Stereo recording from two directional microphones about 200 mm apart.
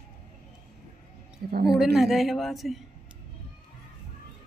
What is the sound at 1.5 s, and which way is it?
Speech, 55° right (ahead or behind).